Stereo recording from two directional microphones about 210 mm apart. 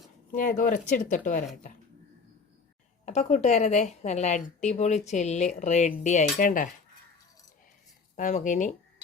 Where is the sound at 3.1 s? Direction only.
35° left (ahead or behind).